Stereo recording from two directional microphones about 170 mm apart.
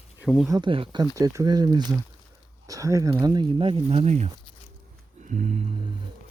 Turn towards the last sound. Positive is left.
turn(degrees=-40)  # may be behind; listen again after turning